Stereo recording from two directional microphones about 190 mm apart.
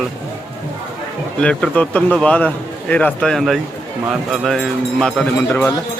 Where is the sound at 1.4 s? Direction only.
5° left (ahead or behind).